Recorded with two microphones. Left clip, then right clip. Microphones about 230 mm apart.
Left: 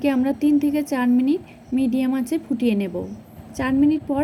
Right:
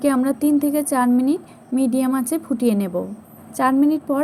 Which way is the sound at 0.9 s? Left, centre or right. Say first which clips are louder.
Right 4 dB; right.